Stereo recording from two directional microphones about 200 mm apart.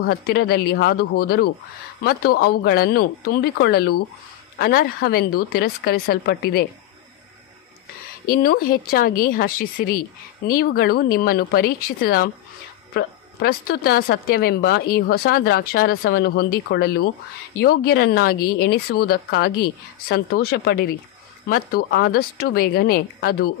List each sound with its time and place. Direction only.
0.0 s speech: 50° left (ahead or behind)
8.3 s speech: 45° left (ahead or behind)